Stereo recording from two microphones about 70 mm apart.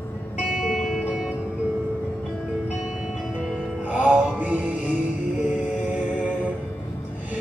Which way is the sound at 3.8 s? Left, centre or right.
Right.